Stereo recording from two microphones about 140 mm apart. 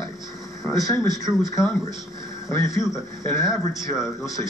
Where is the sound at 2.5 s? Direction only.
20° left (ahead or behind).